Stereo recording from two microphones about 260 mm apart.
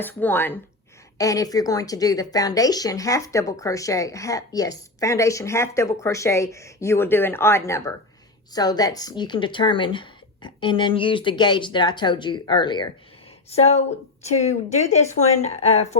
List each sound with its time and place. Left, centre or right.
0.0 s a woman's voice: centre; by 13.8 s left
15.2 s a woman's voice: left